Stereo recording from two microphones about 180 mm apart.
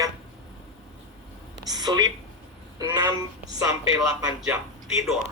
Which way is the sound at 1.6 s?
20° right (ahead or behind).